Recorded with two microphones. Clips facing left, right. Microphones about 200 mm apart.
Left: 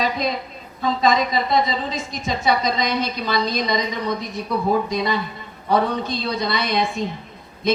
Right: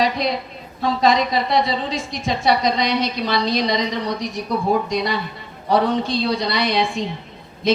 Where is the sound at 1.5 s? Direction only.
45° left (ahead or behind).